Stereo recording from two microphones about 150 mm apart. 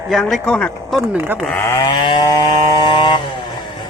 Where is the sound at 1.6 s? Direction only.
20° left (ahead or behind).